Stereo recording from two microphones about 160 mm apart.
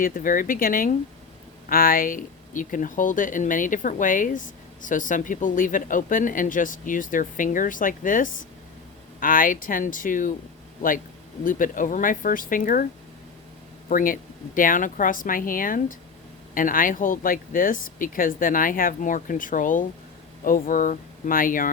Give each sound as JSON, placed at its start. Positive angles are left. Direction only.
{"t": 0.0, "sound": "speech", "side_deg": 60}
{"t": 11.4, "sound": "speech", "side_deg": 55}
{"t": 13.8, "sound": "speech", "side_deg": 60}